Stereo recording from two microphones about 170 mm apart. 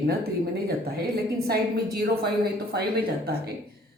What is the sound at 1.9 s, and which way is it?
A woman's voice, 70° right (ahead or behind).